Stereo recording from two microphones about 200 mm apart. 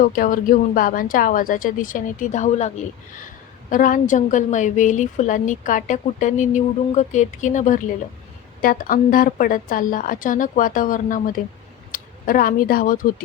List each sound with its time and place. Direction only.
0.0 s a woman's voice: 45° left (ahead or behind)